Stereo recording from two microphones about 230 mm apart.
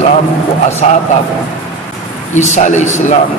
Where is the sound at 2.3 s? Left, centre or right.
Left.